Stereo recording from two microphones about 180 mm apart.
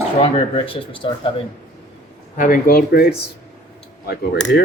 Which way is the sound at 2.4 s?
50° left (ahead or behind).